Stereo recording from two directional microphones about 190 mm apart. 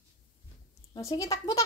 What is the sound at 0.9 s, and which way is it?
Speech, 15° left (ahead or behind).